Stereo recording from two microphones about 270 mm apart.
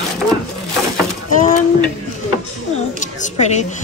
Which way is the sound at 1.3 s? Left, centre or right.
Left.